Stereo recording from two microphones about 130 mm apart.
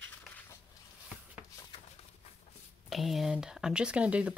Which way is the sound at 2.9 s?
Centre (ahead or behind).